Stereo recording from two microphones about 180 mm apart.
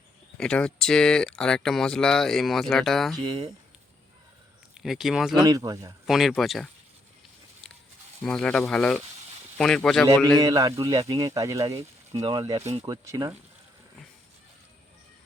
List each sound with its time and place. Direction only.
0.3 s speech: 5° left (ahead or behind)
4.7 s speech: centre (ahead or behind)
5.4 s speech: 20° right (ahead or behind)
6.1 s speech: centre (ahead or behind)
8.2 s speech: 5° left (ahead or behind)
10.4 s speech: 20° right (ahead or behind)
12.8 s speech: 20° right (ahead or behind)